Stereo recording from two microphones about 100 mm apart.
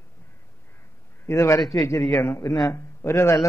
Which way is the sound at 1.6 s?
Centre (ahead or behind).